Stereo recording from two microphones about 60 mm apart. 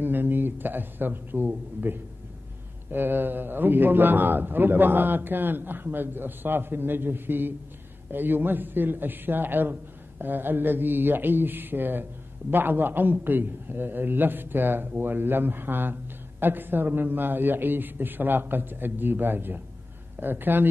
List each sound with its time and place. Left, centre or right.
0.0 s speech: right